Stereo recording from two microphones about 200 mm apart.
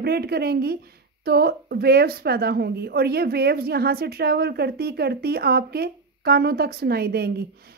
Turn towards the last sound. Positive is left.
turn(degrees=-50)  # may be behind; listen again after turning